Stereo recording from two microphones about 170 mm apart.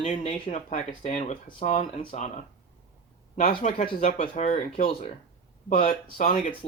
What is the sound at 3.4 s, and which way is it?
Speech, 50° left (ahead or behind).